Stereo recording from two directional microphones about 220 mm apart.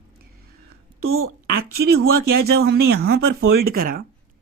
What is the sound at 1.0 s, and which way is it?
Speech, 70° right (ahead or behind).